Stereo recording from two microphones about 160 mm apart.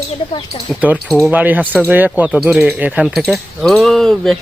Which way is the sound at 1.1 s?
Centre (ahead or behind).